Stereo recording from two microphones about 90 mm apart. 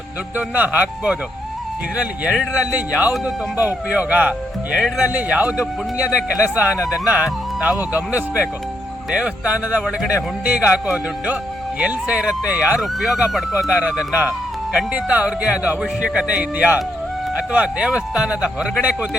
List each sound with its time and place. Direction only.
0.3 s speech: 15° right (ahead or behind)
11.8 s speech: 15° right (ahead or behind)